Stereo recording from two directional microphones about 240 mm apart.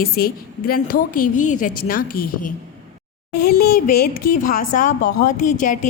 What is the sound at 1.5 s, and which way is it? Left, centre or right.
A woman's voice, left.